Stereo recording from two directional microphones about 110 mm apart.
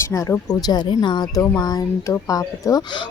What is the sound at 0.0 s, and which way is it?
Speech, 25° left (ahead or behind).